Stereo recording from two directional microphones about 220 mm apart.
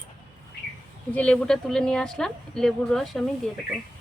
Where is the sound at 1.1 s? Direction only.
5° left (ahead or behind).